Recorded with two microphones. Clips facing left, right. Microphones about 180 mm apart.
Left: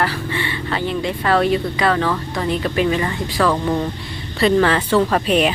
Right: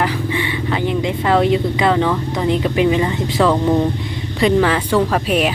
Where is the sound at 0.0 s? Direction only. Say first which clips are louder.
Right 2 dB; 15° right (ahead or behind).